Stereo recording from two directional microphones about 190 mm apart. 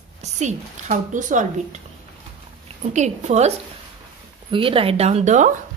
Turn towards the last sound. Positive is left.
turn(degrees=-40)  # may be behind; listen again after turning